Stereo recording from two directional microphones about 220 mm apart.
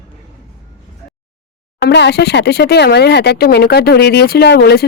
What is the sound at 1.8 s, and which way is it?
Speech, 50° left (ahead or behind).